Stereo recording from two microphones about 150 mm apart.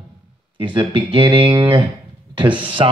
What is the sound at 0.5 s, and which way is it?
Speech, 30° right (ahead or behind).